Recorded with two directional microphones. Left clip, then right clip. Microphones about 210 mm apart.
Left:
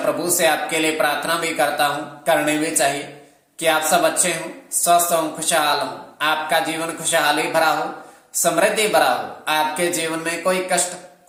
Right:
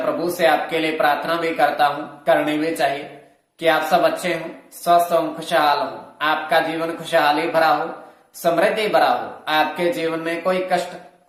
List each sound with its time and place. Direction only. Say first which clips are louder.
0.0 s speech: even; centre (ahead or behind)